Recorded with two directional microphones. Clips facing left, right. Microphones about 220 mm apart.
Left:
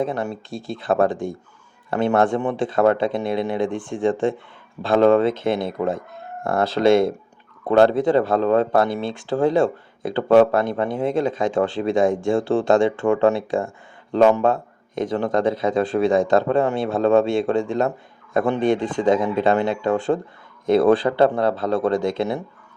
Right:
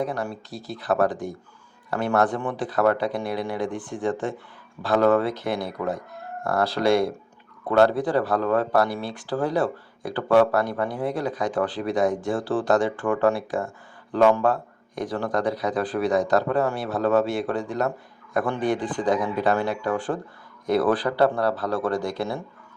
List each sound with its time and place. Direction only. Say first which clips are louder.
0.0 s speech: left 4 dB; 25° left (ahead or behind)